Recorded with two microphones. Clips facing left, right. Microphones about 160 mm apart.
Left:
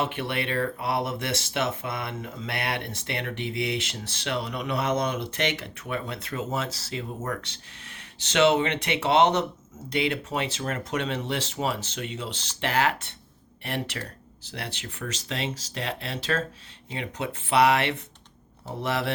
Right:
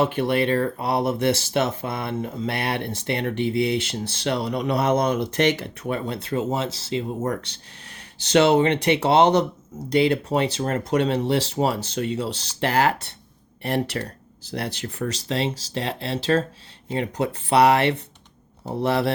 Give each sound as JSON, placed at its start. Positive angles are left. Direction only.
{"t": 0.0, "sound": "speech", "side_deg": -35}